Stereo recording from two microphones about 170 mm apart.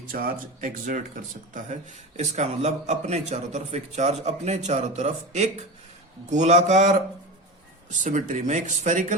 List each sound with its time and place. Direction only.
0.1 s speech: 60° right (ahead or behind)